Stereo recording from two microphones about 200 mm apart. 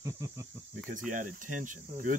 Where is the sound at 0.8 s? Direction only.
40° right (ahead or behind).